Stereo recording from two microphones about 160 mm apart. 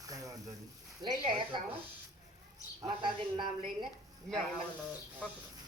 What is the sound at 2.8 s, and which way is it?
Speech, 30° right (ahead or behind).